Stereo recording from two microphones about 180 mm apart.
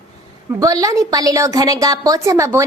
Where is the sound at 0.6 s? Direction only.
20° right (ahead or behind).